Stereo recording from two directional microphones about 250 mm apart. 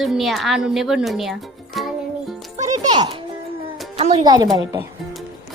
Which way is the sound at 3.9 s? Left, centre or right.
Right.